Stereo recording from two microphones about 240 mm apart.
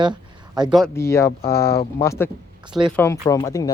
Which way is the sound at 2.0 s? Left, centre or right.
Centre.